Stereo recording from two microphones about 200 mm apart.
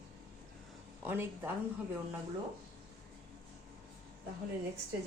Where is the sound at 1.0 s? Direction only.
10° right (ahead or behind).